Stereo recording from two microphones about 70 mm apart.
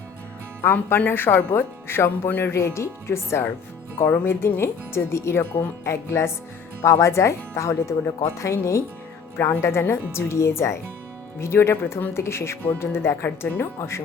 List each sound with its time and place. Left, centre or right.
0.6 s speech: left
2.6 s speech: left
3.9 s speech: left